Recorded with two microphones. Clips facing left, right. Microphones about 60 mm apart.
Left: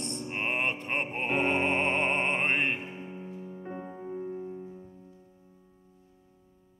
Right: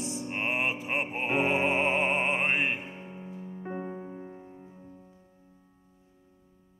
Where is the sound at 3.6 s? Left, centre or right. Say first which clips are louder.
Right 5 dB; centre.